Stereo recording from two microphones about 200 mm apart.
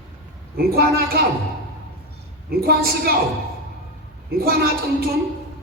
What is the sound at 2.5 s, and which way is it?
Speech, 50° right (ahead or behind).